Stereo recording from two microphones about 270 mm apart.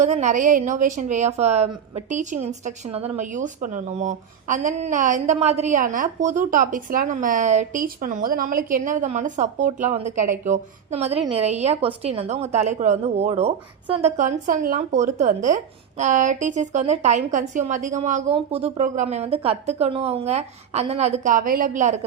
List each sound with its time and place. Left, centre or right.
0.0 s a woman's voice: right